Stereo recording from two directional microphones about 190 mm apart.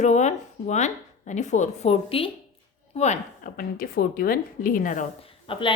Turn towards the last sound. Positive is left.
turn(degrees=25)  # may be behind; listen again after turning